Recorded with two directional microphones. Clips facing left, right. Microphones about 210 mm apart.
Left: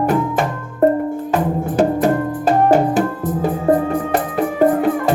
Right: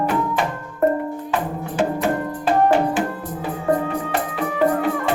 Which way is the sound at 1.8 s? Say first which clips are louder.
Left 5 dB; 40° left (ahead or behind).